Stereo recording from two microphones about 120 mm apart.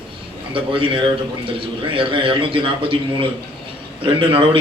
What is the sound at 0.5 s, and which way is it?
A man's voice, 45° right (ahead or behind).